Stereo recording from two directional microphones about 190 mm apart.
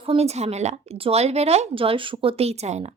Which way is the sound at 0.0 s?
30° right (ahead or behind).